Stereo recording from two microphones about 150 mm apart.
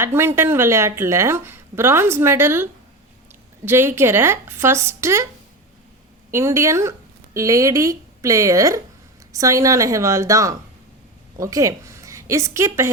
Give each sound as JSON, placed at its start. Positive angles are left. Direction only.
{"t": 0.0, "sound": "a woman's voice", "side_deg": -15}
{"t": 3.7, "sound": "a woman's voice", "side_deg": -15}
{"t": 6.3, "sound": "a woman's voice", "side_deg": -15}